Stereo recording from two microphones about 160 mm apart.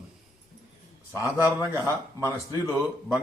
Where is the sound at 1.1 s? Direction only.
15° right (ahead or behind).